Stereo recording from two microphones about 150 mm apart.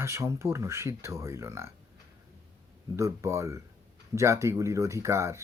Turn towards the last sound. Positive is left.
turn(degrees=-20)  # may be behind; listen again after turning